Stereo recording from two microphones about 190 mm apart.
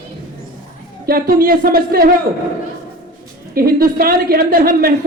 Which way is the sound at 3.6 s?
50° right (ahead or behind).